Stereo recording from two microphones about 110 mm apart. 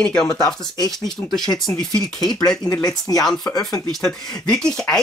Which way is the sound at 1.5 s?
5° left (ahead or behind).